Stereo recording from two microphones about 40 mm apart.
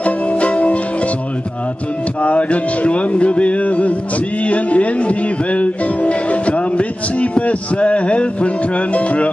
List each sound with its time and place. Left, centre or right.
0.0 s music: left
2.2 s music: left
4.5 s speech: left
8.9 s music: left